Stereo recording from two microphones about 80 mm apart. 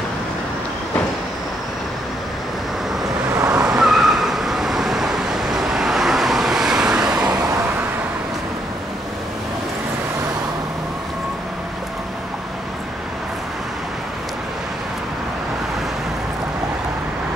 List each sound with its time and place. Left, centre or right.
3.3 s vehicle: right
3.6 s vehicle: centre